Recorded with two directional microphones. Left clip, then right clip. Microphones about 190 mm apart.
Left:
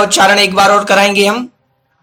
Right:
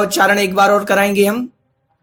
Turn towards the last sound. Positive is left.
turn(degrees=-45)  # may be behind; listen again after turning